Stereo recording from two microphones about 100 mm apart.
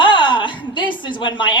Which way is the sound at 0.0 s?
55° left (ahead or behind).